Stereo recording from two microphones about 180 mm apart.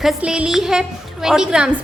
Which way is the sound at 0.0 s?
5° right (ahead or behind).